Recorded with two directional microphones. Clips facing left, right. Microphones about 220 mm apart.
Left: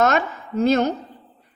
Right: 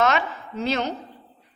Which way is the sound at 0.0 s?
45° left (ahead or behind).